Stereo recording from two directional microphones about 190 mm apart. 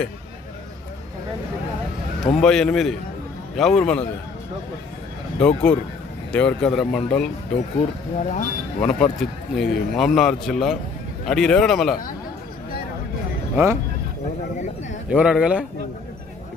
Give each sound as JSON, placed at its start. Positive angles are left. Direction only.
{"t": 2.2, "sound": "a man's voice", "side_deg": 5}
{"t": 5.4, "sound": "a man's voice", "side_deg": 5}
{"t": 8.2, "sound": "speech", "side_deg": 40}
{"t": 8.8, "sound": "a man's voice", "side_deg": 10}
{"t": 15.1, "sound": "a man's voice", "side_deg": -5}